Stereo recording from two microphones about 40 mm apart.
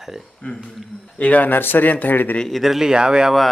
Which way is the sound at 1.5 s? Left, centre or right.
Left.